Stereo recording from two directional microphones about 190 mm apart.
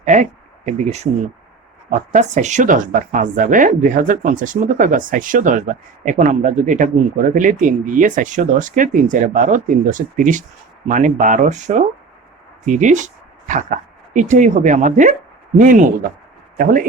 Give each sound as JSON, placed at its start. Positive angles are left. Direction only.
{"t": 0.1, "sound": "speech", "side_deg": -40}